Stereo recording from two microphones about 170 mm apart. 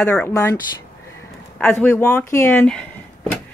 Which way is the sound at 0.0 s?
15° left (ahead or behind).